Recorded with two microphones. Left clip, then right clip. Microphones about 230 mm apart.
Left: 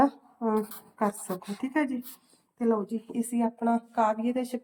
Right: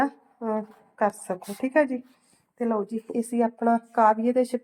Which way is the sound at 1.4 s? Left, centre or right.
Centre.